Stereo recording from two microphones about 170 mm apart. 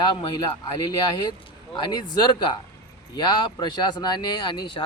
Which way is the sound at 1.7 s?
25° left (ahead or behind).